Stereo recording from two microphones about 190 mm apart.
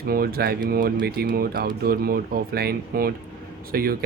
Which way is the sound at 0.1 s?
55° right (ahead or behind).